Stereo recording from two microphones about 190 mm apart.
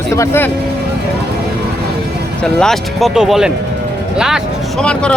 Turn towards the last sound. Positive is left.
turn(degrees=5)  # may be behind; listen again after turning